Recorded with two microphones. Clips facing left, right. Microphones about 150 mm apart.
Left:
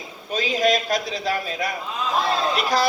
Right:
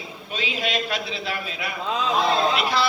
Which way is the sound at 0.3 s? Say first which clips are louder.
Left 8 dB; 40° left (ahead or behind).